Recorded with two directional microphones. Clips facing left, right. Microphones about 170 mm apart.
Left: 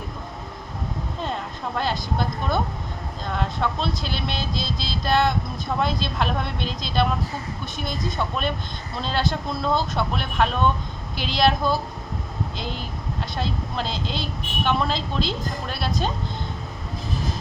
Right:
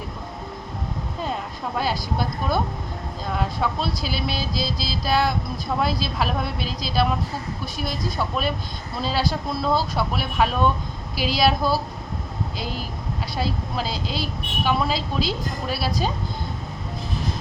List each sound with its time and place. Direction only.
1.2 s a woman's voice: 5° right (ahead or behind)